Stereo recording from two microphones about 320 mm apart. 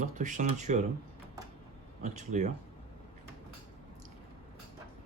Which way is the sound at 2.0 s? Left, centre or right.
Right.